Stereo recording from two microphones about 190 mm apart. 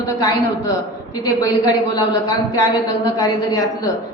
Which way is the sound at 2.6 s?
20° left (ahead or behind).